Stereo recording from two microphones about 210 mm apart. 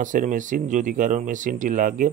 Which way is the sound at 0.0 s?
40° right (ahead or behind).